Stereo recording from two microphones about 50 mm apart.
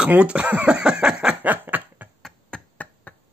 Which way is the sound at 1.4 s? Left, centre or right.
Right.